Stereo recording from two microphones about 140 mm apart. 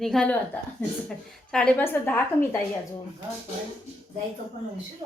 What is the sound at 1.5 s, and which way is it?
Speech, 5° left (ahead or behind).